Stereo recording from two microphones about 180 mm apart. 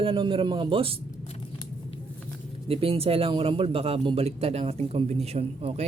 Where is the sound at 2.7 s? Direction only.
30° right (ahead or behind).